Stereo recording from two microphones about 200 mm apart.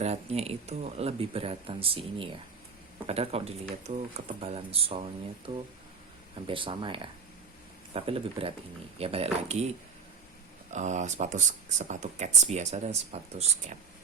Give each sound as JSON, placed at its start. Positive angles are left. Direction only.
{"t": 0.0, "sound": "speech", "side_deg": -30}
{"t": 10.7, "sound": "speech", "side_deg": -35}